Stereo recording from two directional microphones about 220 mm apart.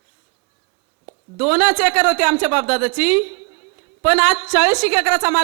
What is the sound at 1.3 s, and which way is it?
A man's voice, 5° right (ahead or behind).